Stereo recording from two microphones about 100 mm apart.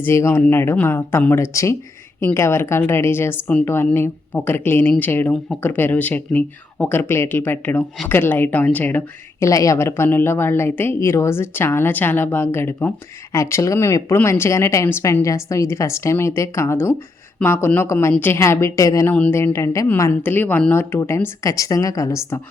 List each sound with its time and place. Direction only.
0.0 s a woman's voice: 30° left (ahead or behind)
9.4 s a woman's voice: 35° left (ahead or behind)
19.0 s a woman's voice: 15° left (ahead or behind)
19.5 s a woman's voice: 30° left (ahead or behind)
20.2 s a woman's voice: 20° left (ahead or behind)
21.0 s a woman's voice: 30° left (ahead or behind)